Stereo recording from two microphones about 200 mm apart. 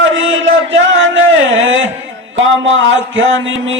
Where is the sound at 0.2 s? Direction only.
70° right (ahead or behind).